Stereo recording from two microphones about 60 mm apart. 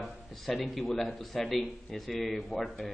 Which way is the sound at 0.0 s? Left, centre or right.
Centre.